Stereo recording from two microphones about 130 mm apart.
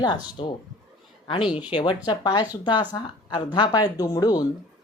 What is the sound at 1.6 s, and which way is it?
Speech, 40° left (ahead or behind).